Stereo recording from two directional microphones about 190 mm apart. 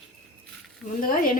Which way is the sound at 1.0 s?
45° left (ahead or behind).